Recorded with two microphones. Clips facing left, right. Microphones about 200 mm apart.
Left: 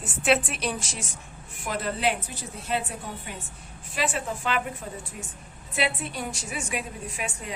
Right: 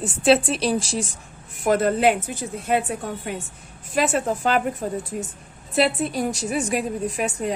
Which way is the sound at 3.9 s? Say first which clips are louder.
Right 8 dB; 45° right (ahead or behind).